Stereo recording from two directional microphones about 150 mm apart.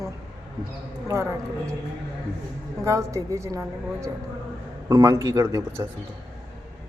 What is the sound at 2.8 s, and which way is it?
Speech, 20° right (ahead or behind).